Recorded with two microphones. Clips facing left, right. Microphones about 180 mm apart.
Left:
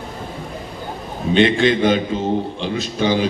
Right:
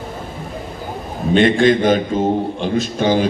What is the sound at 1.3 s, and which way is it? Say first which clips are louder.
A man's voice: right 2 dB; 50° right (ahead or behind).